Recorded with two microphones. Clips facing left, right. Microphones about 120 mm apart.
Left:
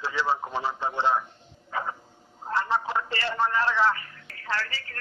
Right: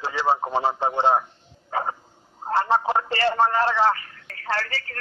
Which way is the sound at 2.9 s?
60° right (ahead or behind).